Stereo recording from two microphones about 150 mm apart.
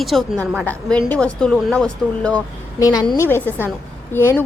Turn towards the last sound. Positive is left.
turn(degrees=15)  # may be behind; listen again after turning